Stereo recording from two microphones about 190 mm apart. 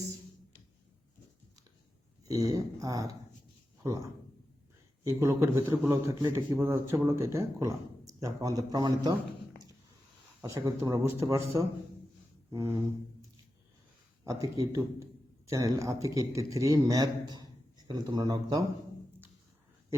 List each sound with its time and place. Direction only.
2.2 s a man's voice: 20° right (ahead or behind)
5.0 s a man's voice: 15° right (ahead or behind)
10.4 s a man's voice: 15° right (ahead or behind)
12.5 s a sound: 15° right (ahead or behind)
14.3 s a man's voice: 15° right (ahead or behind)